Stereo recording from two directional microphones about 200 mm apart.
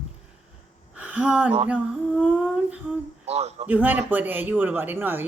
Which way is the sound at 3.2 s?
30° right (ahead or behind).